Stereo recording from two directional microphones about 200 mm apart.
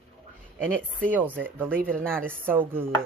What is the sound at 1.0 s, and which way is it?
Speech, 10° right (ahead or behind).